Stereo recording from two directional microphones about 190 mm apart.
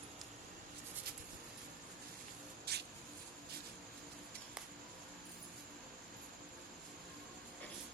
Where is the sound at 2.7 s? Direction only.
55° right (ahead or behind).